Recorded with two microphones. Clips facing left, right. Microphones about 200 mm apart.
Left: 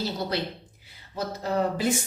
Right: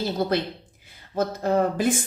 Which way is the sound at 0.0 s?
50° right (ahead or behind).